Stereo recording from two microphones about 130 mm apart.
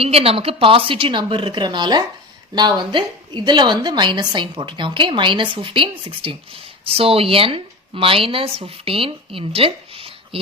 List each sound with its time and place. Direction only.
0.0 s a woman's voice: 50° right (ahead or behind)